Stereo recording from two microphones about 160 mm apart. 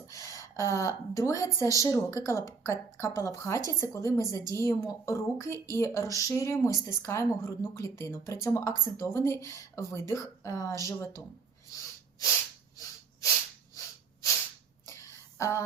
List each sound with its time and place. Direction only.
0.1 s speech: 20° left (ahead or behind)
12.7 s snort: 20° left (ahead or behind)
15.4 s a sound: 20° left (ahead or behind)